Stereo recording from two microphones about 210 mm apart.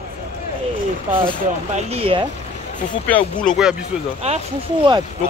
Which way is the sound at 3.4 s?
Centre (ahead or behind).